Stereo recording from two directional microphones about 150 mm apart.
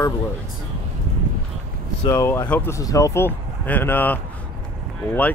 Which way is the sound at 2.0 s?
20° left (ahead or behind).